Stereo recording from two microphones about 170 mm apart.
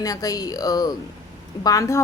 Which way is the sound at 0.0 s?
20° left (ahead or behind).